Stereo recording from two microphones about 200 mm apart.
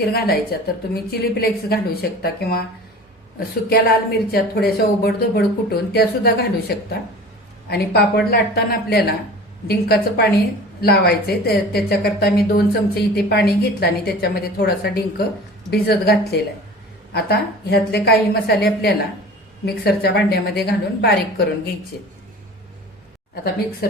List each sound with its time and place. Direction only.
0.0 s a woman's voice: 50° left (ahead or behind)
3.7 s a woman's voice: 50° left (ahead or behind)